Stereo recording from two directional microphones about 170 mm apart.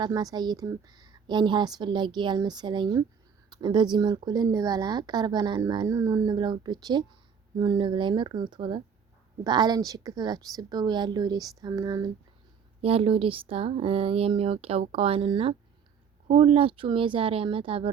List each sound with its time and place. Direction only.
0.0 s speech: 20° right (ahead or behind)
12.8 s speech: 35° right (ahead or behind)